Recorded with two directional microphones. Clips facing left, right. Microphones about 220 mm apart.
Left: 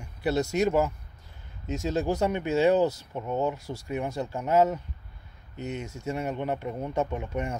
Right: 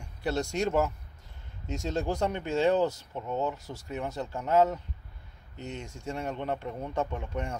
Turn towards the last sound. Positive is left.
turn(degrees=10)  # may be behind; listen again after turning